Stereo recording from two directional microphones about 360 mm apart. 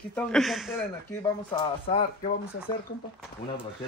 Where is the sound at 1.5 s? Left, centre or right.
Centre.